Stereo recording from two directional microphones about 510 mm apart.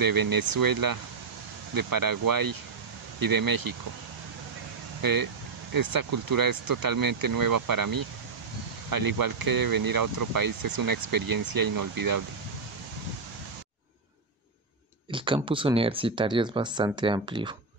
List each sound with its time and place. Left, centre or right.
0.0 s speech: right
5.0 s speech: right
15.0 s speech: centre